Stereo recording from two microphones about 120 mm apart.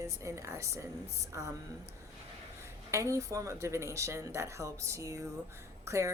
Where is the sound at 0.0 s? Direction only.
25° right (ahead or behind).